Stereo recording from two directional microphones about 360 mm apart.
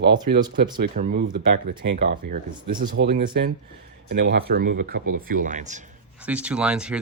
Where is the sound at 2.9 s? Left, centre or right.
Right.